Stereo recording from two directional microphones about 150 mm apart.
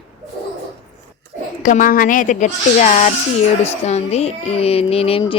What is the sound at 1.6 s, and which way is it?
A woman's voice, 60° left (ahead or behind).